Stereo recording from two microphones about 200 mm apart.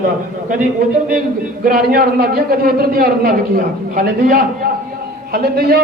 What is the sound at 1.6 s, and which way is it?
A man's voice, 45° right (ahead or behind).